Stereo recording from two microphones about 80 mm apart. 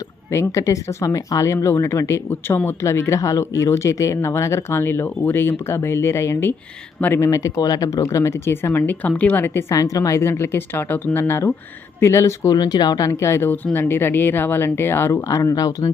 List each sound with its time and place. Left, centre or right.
0.3 s speech: left
7.3 s speech: left
9.7 s speech: left
12.5 s speech: left
13.1 s speech: left
15.3 s speech: left